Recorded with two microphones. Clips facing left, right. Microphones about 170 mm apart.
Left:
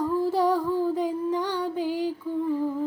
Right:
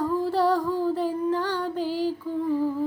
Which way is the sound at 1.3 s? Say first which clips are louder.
Right 1 dB; 10° left (ahead or behind).